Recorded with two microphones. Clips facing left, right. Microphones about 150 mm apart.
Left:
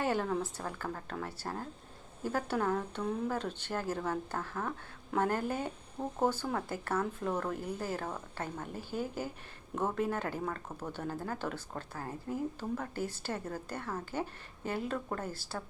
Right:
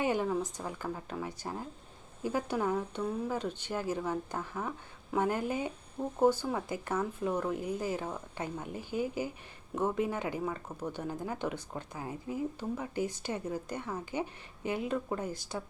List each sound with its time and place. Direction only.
0.0 s speech: 10° right (ahead or behind)
8.9 s speech: 45° left (ahead or behind)
9.7 s speech: 10° right (ahead or behind)